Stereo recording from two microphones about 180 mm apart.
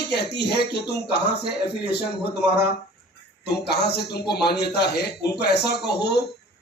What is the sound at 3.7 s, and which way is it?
Speech, 65° left (ahead or behind).